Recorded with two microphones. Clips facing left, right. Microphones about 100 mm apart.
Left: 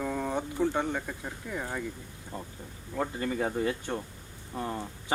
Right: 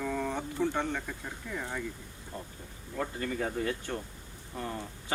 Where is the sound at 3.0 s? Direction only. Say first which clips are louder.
Left 3 dB; 20° left (ahead or behind).